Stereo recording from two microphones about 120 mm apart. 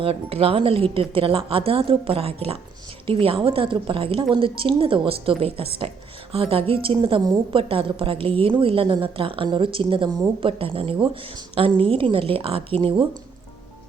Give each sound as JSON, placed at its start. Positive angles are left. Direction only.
{"t": 0.0, "sound": "a woman's voice", "side_deg": -55}